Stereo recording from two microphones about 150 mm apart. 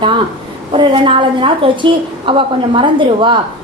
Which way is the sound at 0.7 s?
35° right (ahead or behind).